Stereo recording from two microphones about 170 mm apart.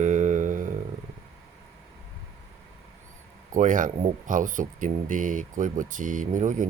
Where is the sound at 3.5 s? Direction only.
50° right (ahead or behind).